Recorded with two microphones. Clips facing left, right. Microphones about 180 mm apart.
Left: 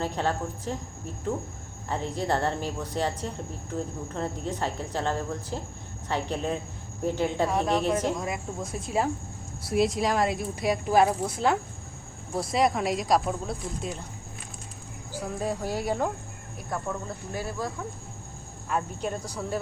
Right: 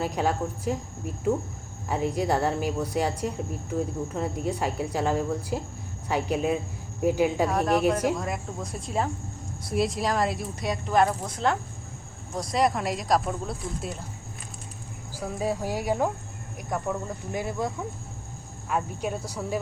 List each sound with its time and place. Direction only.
0.0 s speech: 10° right (ahead or behind)
15.1 s speech: 10° right (ahead or behind)
18.7 s speech: 5° right (ahead or behind)